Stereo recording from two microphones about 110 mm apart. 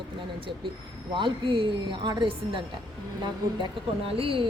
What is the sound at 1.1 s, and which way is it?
A woman's voice, 50° right (ahead or behind).